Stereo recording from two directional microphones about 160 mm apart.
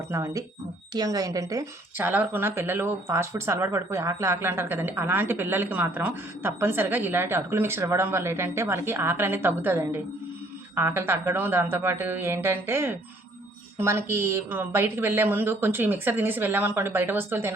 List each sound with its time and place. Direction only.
0.1 s a woman's voice: 20° right (ahead or behind)